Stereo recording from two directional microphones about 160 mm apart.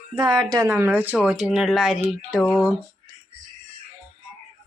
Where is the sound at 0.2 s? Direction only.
25° right (ahead or behind); by 2.6 s 5° left (ahead or behind).